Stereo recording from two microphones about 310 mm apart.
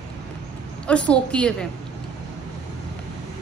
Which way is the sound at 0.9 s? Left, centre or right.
Centre.